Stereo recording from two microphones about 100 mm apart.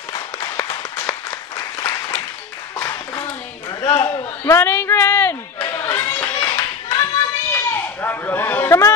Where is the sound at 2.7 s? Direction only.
30° left (ahead or behind).